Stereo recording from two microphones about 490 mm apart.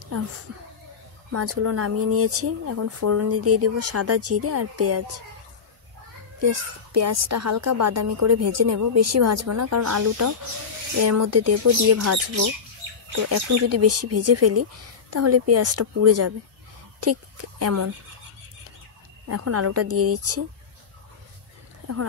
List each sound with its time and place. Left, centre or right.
1.3 s speech: right
6.4 s a child's voice: right
19.2 s speech: right